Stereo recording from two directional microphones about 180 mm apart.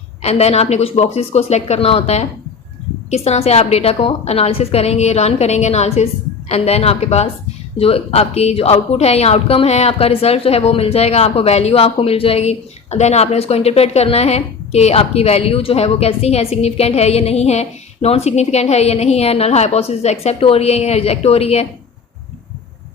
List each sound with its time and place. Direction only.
0.2 s a woman's voice: 35° left (ahead or behind)